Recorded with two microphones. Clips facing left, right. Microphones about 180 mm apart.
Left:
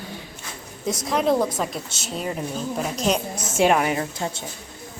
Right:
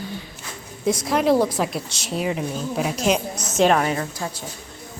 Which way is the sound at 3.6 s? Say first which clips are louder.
Right 1 dB; 10° left (ahead or behind).